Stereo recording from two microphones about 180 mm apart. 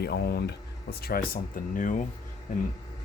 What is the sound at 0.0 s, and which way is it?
Speech, 60° left (ahead or behind).